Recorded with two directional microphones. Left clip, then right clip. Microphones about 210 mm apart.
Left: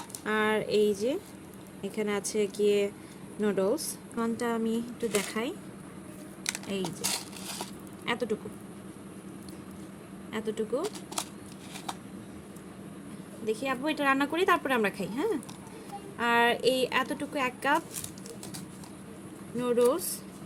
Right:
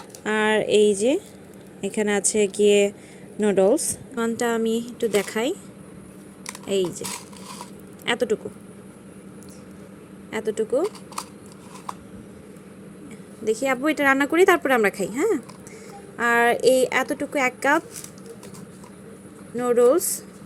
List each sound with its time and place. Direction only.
0.3 s speech: 20° right (ahead or behind)
6.8 s speech: 20° right (ahead or behind)
8.0 s speech: 20° right (ahead or behind)
10.3 s speech: 20° right (ahead or behind)
13.4 s speech: 20° right (ahead or behind)
19.5 s speech: 15° right (ahead or behind)